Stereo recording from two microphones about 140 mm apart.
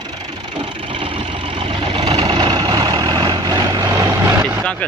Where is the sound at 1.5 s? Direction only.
40° right (ahead or behind); by 4.3 s 20° right (ahead or behind).